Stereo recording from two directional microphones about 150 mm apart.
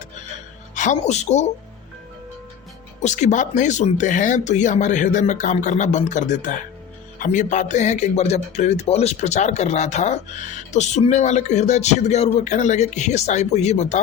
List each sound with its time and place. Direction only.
0.8 s speech: 50° left (ahead or behind)
3.0 s speech: 50° left (ahead or behind)